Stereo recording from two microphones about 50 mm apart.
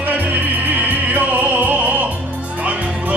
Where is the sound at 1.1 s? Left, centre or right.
Right.